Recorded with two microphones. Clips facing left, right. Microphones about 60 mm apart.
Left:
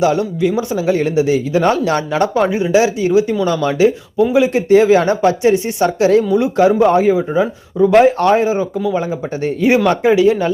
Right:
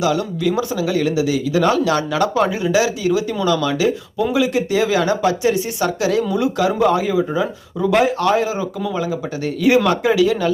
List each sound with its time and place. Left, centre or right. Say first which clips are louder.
0.0 s speech: left 4 dB; left